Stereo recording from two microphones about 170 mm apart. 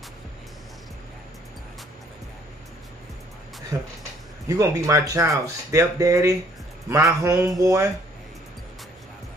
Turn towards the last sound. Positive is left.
turn(degrees=-20)  # may be behind; listen again after turning